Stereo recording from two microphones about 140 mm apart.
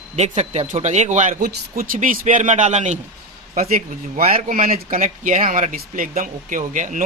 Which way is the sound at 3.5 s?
70° right (ahead or behind).